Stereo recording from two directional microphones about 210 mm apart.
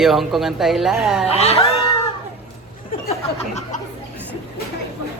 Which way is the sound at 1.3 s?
30° left (ahead or behind).